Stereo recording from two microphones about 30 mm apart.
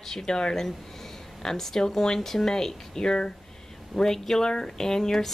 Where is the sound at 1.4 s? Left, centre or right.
Centre.